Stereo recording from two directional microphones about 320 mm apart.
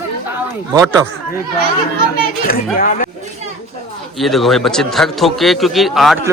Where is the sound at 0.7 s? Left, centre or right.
Centre.